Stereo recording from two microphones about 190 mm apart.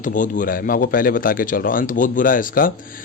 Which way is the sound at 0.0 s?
45° left (ahead or behind).